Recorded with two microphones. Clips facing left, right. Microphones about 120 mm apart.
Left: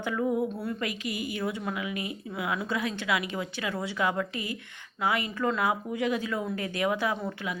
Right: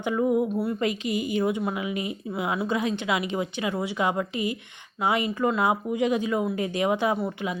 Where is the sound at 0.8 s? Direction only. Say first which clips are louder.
Right 6 dB; 25° right (ahead or behind).